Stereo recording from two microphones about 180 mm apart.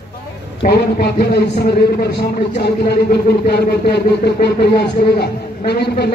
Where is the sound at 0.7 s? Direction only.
60° left (ahead or behind).